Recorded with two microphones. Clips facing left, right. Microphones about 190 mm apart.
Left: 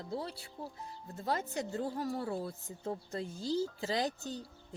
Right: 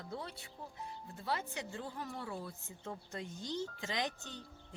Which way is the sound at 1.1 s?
40° left (ahead or behind).